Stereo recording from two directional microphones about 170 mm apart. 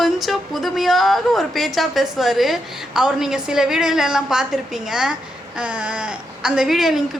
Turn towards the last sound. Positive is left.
turn(degrees=0)  # may be behind; listen again after turning